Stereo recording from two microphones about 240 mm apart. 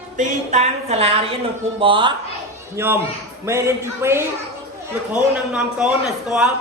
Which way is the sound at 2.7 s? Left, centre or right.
Centre.